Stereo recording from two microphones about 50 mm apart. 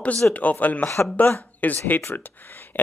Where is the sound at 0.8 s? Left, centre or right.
Left.